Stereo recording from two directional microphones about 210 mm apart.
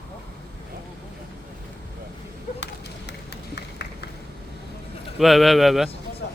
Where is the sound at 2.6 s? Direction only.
55° left (ahead or behind).